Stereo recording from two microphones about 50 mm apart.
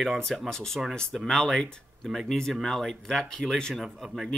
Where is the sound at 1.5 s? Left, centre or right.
Left.